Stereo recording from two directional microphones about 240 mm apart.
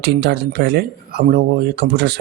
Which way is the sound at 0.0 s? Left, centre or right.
Right.